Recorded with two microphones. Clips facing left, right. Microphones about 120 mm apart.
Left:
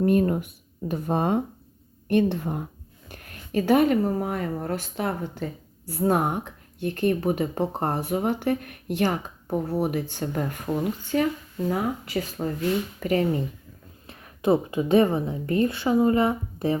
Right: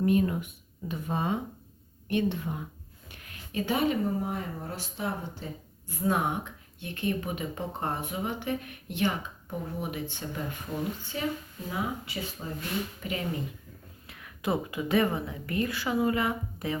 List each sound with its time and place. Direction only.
0.0 s speech: 50° left (ahead or behind)
3.1 s a sound: 45° left (ahead or behind)
4.2 s speech: 65° left (ahead or behind)
5.8 s speech: 35° left (ahead or behind)
11.1 s speech: 60° left (ahead or behind)
11.7 s speech: 45° left (ahead or behind)
14.1 s a woman's voice: 35° left (ahead or behind)